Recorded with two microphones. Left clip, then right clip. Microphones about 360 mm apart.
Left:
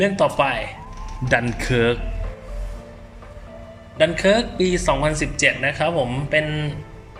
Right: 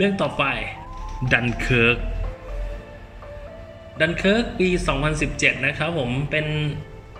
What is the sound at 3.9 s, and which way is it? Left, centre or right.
Speech, centre.